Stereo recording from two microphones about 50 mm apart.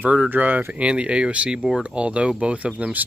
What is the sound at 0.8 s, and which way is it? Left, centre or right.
Speech, right.